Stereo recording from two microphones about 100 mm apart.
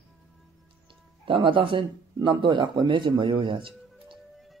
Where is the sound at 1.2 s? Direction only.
60° right (ahead or behind).